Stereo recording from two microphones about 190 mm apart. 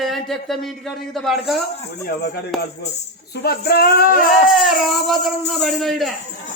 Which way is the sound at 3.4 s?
55° left (ahead or behind).